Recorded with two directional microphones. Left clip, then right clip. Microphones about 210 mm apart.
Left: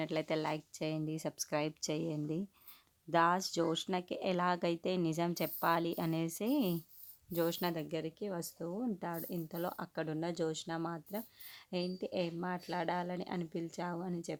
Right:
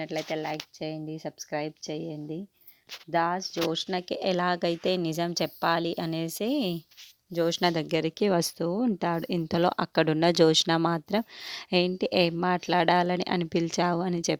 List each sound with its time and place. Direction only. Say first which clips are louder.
0.0 s speech: right 4 dB; 10° right (ahead or behind); by 14.3 s 45° right (ahead or behind)